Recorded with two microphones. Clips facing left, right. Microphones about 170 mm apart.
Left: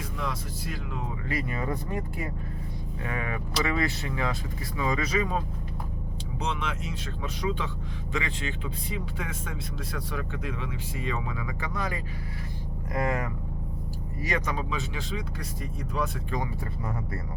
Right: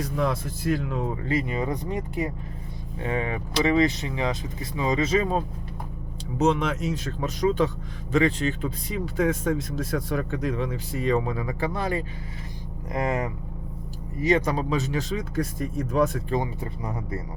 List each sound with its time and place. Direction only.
0.0 s speech: 45° right (ahead or behind)
1.2 s speech: 25° right (ahead or behind)
6.4 s speech: 40° right (ahead or behind)
16.3 s speech: 20° right (ahead or behind)